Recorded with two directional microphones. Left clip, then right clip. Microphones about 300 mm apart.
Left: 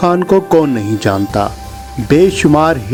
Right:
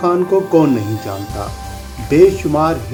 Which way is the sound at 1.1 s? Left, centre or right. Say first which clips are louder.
Left 10 dB; left.